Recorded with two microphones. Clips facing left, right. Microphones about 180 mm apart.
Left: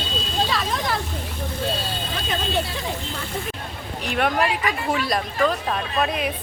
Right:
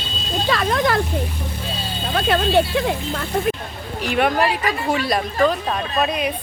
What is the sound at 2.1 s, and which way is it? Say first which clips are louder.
Speech: right 9 dB; 65° right (ahead or behind).